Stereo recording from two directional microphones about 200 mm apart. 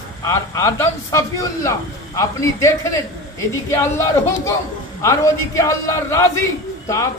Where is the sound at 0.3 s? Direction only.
15° left (ahead or behind).